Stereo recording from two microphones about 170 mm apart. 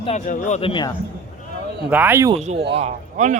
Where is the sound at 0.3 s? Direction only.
50° left (ahead or behind).